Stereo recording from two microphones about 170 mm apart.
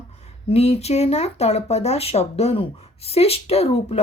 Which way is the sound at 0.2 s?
40° left (ahead or behind).